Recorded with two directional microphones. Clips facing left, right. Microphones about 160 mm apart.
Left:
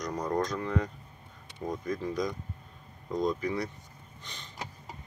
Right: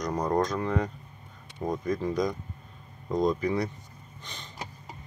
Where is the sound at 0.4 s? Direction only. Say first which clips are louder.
Right 4 dB; 85° right.